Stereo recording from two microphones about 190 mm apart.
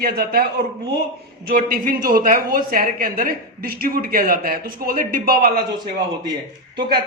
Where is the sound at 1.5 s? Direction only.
50° right (ahead or behind).